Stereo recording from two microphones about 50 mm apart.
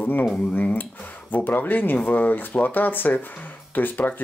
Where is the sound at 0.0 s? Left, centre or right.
Left.